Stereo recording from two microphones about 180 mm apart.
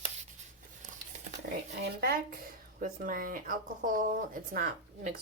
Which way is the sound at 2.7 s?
50° right (ahead or behind).